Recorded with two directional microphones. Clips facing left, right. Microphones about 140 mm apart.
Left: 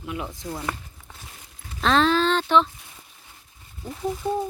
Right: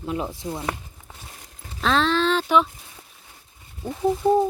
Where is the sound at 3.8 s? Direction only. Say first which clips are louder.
Right 6 dB; 25° right (ahead or behind).